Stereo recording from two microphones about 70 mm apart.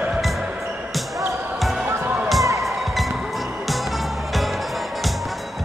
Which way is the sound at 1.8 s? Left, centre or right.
Right.